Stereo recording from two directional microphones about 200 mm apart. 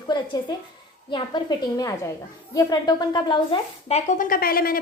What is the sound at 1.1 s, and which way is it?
A woman's voice, 20° left (ahead or behind).